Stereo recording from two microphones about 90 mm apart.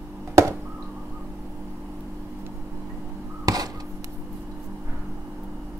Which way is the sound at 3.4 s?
45° right (ahead or behind).